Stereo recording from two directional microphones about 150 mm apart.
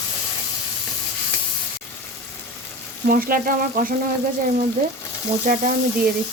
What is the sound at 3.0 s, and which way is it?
Speech, 65° right (ahead or behind).